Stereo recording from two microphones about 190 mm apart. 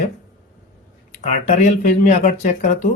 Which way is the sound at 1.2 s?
40° left (ahead or behind).